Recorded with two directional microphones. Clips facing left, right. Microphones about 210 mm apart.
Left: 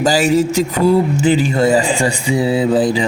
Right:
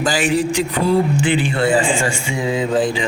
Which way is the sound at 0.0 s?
40° left (ahead or behind).